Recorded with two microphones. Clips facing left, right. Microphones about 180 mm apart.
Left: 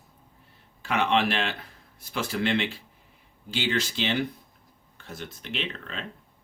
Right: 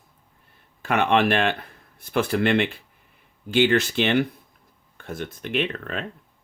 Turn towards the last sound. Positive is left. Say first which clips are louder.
# right 8 dB
turn(degrees=-55)  # may be behind; listen again after turning